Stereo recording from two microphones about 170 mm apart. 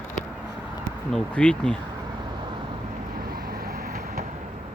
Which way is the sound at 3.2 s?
60° right (ahead or behind).